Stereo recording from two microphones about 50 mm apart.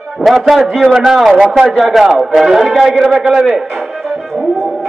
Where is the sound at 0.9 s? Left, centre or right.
Centre.